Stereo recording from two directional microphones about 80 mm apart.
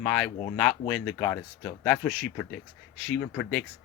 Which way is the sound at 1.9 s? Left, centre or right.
Centre.